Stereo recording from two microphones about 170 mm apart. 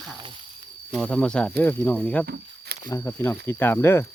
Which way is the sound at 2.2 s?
70° right (ahead or behind).